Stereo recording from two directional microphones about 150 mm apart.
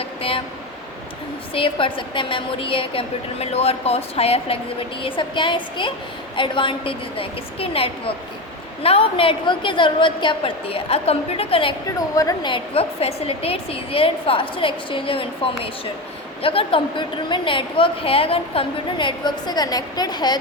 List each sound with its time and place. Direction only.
0.0 s speech: 40° left (ahead or behind)
1.5 s a woman's voice: 35° left (ahead or behind)
11.9 s a woman's voice: 25° left (ahead or behind)